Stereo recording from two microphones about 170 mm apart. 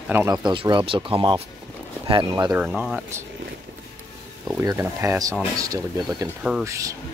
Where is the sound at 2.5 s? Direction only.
5° right (ahead or behind).